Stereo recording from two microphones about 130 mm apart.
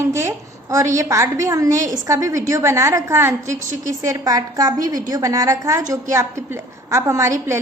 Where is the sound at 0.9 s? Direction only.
25° right (ahead or behind).